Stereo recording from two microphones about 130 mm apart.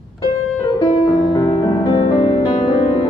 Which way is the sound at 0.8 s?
35° left (ahead or behind).